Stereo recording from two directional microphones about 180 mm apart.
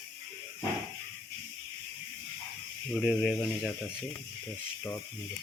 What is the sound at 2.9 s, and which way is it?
Speech, centre (ahead or behind).